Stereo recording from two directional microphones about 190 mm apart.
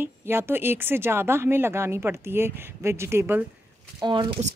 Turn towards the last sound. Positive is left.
turn(degrees=-20)  # may be behind; listen again after turning